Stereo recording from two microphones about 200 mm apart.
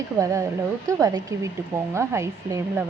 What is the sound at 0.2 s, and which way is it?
Speech, 15° right (ahead or behind).